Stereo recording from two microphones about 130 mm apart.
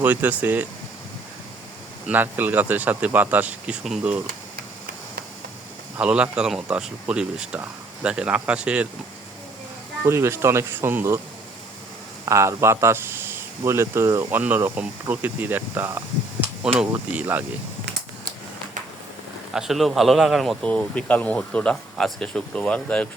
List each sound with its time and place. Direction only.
0.0 s speech: 15° right (ahead or behind)
2.0 s speech: 15° right (ahead or behind)
6.0 s speech: 10° right (ahead or behind)
10.0 s speech: 20° right (ahead or behind)
12.2 s speech: 20° right (ahead or behind)
19.5 s speech: centre (ahead or behind)